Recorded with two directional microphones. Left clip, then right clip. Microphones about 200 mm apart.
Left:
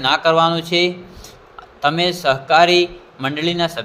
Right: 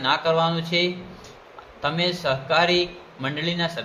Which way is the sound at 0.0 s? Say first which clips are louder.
Left 6 dB; 40° left (ahead or behind).